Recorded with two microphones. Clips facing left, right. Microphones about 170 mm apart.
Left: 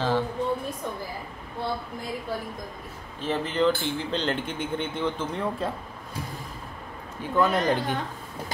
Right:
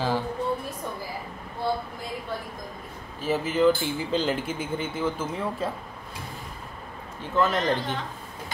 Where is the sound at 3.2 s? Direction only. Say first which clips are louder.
Right 2 dB; 5° right (ahead or behind).